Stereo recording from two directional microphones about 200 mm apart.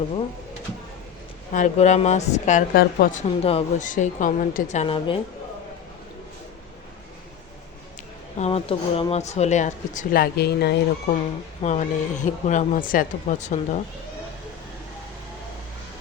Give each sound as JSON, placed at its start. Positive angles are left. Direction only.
{"t": 1.5, "sound": "a woman's voice", "side_deg": 35}
{"t": 8.4, "sound": "a woman's voice", "side_deg": 30}
{"t": 11.6, "sound": "a woman's voice", "side_deg": 35}